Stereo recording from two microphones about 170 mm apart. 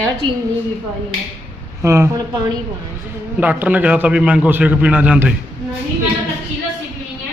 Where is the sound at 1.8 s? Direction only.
15° right (ahead or behind).